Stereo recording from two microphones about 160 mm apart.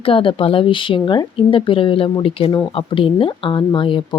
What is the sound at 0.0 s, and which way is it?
A woman's voice, 35° left (ahead or behind).